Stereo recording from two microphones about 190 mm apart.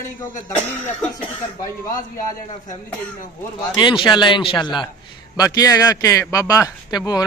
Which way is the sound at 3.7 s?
25° left (ahead or behind).